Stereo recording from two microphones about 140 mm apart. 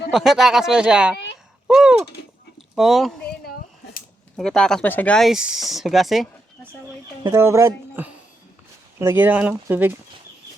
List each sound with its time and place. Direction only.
0.1 s speech: centre (ahead or behind)
1.6 s a sound: 5° right (ahead or behind)
2.7 s speech: centre (ahead or behind)
4.4 s speech: 5° left (ahead or behind)
7.3 s speech: 20° right (ahead or behind)